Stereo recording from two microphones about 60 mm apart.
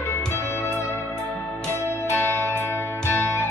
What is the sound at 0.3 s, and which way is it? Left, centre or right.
Music, left.